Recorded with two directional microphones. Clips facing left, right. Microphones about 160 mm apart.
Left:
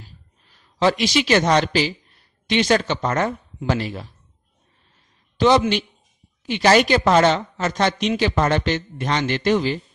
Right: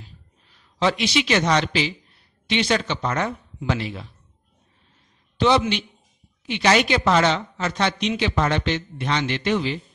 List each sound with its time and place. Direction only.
0.7 s speech: 45° left (ahead or behind)
5.4 s a woman's voice: 45° left (ahead or behind)